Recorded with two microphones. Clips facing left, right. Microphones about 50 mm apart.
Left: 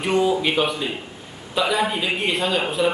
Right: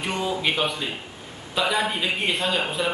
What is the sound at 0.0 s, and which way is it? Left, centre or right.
A man's voice, centre.